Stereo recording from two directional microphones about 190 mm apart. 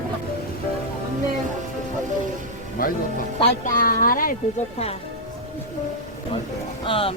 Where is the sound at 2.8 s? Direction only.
50° left (ahead or behind).